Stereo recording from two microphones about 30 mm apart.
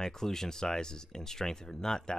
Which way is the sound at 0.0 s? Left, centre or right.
Centre.